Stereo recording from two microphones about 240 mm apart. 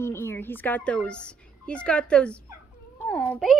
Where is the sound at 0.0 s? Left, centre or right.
Centre.